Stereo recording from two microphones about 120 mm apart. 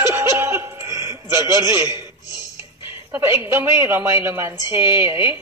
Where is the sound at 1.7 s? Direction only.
35° left (ahead or behind).